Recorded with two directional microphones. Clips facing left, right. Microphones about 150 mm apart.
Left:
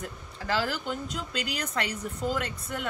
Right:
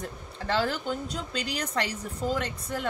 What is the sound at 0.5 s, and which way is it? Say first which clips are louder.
A woman's voice: right 2 dB; 30° right (ahead or behind).